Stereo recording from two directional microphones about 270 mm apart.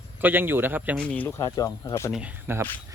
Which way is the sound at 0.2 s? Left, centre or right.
Centre.